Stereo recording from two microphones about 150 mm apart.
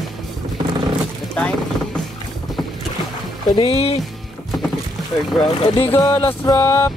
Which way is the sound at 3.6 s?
40° left (ahead or behind).